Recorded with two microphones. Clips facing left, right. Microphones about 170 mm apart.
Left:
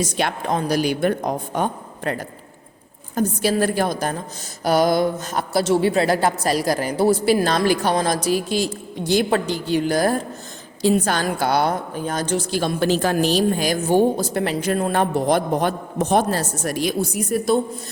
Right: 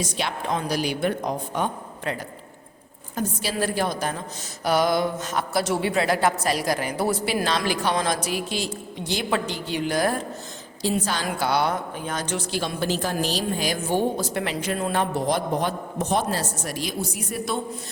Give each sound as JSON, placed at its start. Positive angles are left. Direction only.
{"t": 0.2, "sound": "a woman's voice", "side_deg": 50}
{"t": 7.4, "sound": "a woman's voice", "side_deg": 45}
{"t": 10.8, "sound": "a woman's voice", "side_deg": 55}
{"t": 12.8, "sound": "a woman's voice", "side_deg": 75}